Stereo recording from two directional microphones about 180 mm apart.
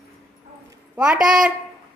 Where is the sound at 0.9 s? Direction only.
5° right (ahead or behind).